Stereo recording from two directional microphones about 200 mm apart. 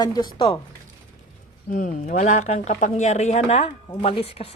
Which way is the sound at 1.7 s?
40° left (ahead or behind).